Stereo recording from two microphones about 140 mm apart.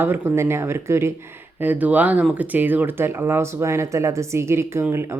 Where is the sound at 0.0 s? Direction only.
15° right (ahead or behind).